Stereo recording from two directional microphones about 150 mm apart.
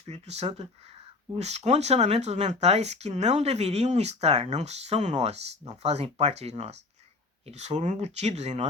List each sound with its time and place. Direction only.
0.0 s speech: 45° right (ahead or behind)